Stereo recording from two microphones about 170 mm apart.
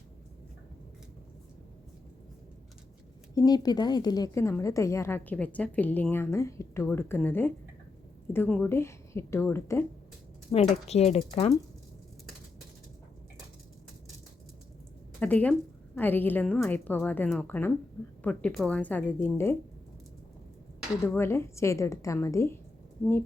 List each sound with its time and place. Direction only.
3.3 s a woman's voice: 25° left (ahead or behind)
10.5 s speech: 40° left (ahead or behind)
15.2 s a woman's voice: 10° left (ahead or behind)
21.2 s a woman's voice: 15° left (ahead or behind)